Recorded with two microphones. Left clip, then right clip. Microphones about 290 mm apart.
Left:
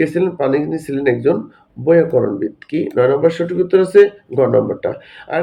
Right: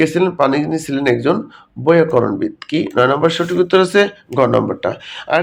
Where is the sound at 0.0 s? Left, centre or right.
Centre.